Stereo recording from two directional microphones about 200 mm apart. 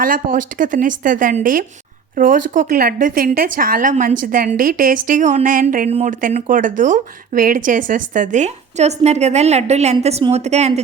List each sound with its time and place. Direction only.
0.0 s a woman's voice: 45° right (ahead or behind)